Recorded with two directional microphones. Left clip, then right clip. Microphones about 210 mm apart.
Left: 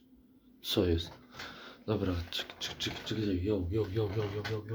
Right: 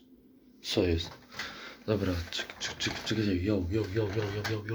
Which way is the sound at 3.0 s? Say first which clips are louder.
Right 2 dB; 5° right (ahead or behind).